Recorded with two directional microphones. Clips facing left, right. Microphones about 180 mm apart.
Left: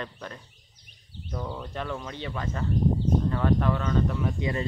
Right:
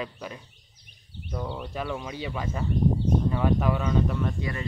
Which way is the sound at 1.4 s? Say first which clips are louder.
Right 2 dB; 20° right (ahead or behind).